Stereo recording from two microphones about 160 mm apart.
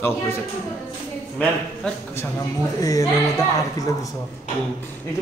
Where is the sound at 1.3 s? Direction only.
5° left (ahead or behind).